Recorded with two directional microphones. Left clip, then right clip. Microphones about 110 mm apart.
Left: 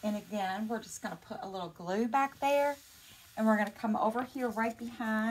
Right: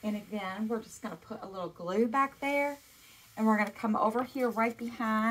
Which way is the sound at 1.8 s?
25° left (ahead or behind).